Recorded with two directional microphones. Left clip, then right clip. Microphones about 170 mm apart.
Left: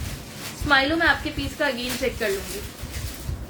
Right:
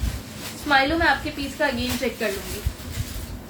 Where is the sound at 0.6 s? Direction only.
25° left (ahead or behind).